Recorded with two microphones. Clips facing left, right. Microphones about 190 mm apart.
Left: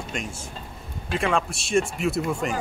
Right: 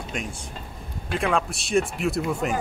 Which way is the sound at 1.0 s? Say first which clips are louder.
Even; centre (ahead or behind).